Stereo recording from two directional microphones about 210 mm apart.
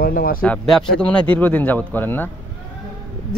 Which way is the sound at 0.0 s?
45° left (ahead or behind).